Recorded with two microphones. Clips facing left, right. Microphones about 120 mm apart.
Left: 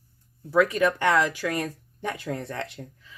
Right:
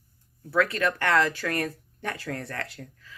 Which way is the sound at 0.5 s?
15° left (ahead or behind).